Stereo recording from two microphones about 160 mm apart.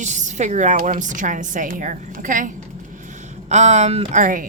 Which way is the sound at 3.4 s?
45° right (ahead or behind).